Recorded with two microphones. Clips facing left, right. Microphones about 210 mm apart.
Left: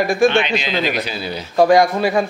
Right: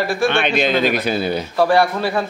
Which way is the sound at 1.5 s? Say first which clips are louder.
Left 4 dB; 15° left (ahead or behind).